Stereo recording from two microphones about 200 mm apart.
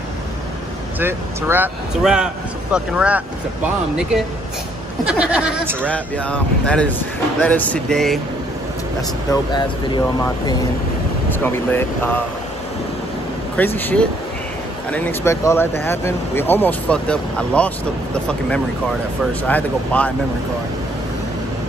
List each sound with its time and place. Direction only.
0.9 s speech: 10° right (ahead or behind)
5.0 s speech: 5° right (ahead or behind)
5.8 s speech: 5° left (ahead or behind)
9.3 s speech: 20° left (ahead or behind)
11.3 s speech: 10° left (ahead or behind)
13.7 s speech: 10° left (ahead or behind)
19.4 s speech: 5° left (ahead or behind)